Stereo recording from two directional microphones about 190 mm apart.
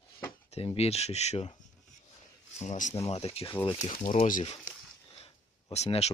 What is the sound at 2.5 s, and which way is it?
Speech, 40° left (ahead or behind).